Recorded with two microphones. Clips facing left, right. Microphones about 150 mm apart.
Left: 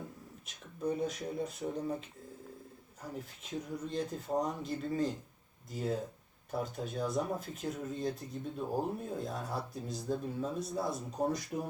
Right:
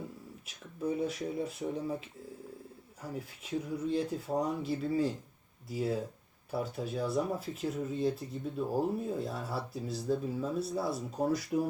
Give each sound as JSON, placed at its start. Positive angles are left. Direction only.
{"t": 0.4, "sound": "speech", "side_deg": -5}